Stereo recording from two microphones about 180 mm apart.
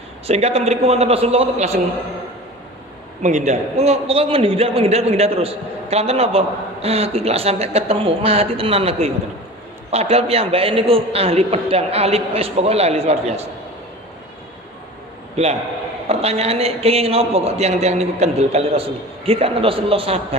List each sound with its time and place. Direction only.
0.3 s a man's voice: 35° right (ahead or behind)
3.2 s a man's voice: 40° right (ahead or behind)
16.0 s a man's voice: 35° right (ahead or behind)